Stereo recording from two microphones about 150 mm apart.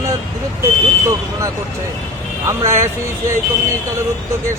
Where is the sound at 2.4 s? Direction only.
20° right (ahead or behind).